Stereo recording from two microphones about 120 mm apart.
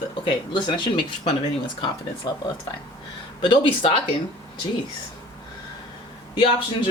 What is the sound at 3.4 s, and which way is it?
Speech, 45° left (ahead or behind).